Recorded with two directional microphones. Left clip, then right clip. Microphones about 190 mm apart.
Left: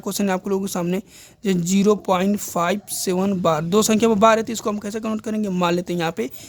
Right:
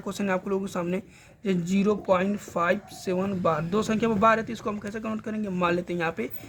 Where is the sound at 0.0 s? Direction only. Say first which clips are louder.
Left 5 dB; 50° left (ahead or behind).